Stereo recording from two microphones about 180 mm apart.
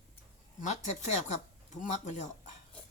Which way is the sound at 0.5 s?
40° left (ahead or behind).